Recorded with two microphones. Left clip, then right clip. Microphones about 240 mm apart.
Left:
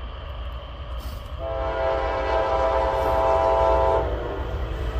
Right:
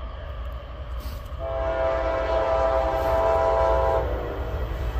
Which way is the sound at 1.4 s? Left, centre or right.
Centre.